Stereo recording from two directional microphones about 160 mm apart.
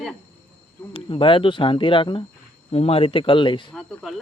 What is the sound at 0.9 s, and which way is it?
Speech, 35° left (ahead or behind).